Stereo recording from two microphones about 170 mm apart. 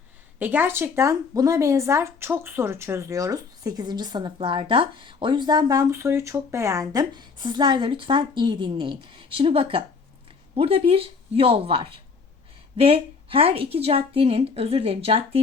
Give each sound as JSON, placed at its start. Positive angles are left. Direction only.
{"t": 0.3, "sound": "a woman's voice", "side_deg": -10}